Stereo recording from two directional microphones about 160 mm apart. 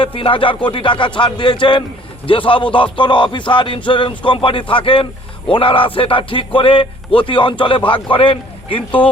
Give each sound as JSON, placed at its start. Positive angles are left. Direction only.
{"t": 0.0, "sound": "a man's voice", "side_deg": 35}